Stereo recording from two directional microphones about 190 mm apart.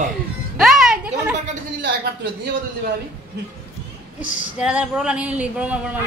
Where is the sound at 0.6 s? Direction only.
Centre (ahead or behind).